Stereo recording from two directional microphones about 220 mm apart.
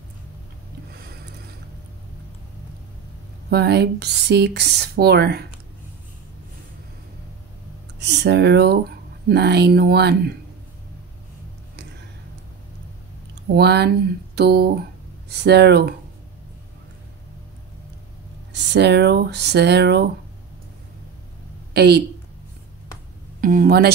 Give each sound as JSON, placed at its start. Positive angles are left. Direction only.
{"t": 3.4, "sound": "speech", "side_deg": -50}
{"t": 8.0, "sound": "speech", "side_deg": -50}
{"t": 13.6, "sound": "speech", "side_deg": -50}
{"t": 18.5, "sound": "speech", "side_deg": -50}
{"t": 21.7, "sound": "speech", "side_deg": -50}
{"t": 23.4, "sound": "speech", "side_deg": -40}